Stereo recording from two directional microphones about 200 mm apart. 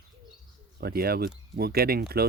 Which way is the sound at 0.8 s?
50° right (ahead or behind).